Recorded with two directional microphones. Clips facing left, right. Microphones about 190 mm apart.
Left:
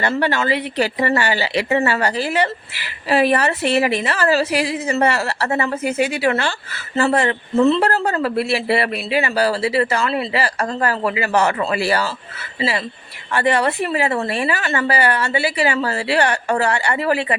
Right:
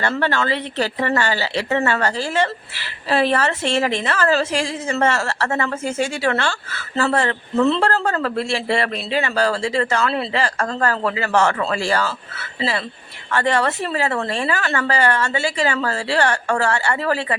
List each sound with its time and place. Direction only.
0.2 s a woman's voice: 15° left (ahead or behind)
7.6 s a woman's voice: centre (ahead or behind)